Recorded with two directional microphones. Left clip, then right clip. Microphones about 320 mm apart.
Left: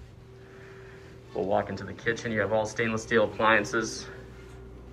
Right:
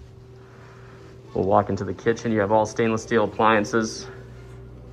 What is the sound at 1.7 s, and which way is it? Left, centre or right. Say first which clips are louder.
Speech: right 7 dB; centre.